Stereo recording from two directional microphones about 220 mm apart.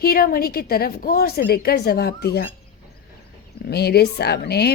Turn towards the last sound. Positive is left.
turn(degrees=45)  # may be behind; listen again after turning